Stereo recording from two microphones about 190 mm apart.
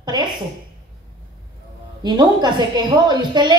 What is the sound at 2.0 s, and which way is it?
A woman's voice, 20° right (ahead or behind).